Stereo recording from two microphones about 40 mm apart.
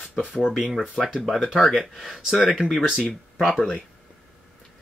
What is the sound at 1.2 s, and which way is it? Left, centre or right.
Speech, centre.